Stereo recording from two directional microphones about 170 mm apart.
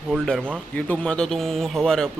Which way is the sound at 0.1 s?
Centre (ahead or behind).